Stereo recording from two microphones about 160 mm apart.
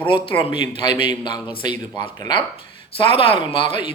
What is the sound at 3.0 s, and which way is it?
Speech, 35° left (ahead or behind).